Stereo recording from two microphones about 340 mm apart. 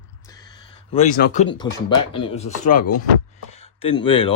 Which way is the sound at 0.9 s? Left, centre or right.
Left.